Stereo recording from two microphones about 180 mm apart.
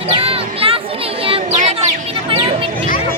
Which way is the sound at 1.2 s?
30° right (ahead or behind).